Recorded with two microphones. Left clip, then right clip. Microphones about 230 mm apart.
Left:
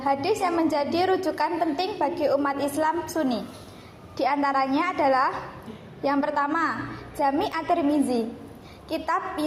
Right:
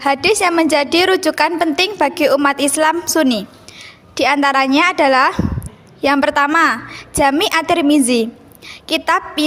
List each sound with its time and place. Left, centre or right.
0.0 s a woman's voice: right